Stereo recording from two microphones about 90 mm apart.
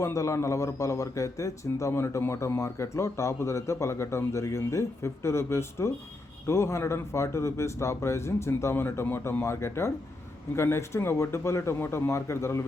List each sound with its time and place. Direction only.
0.0 s a man's voice: 35° left (ahead or behind)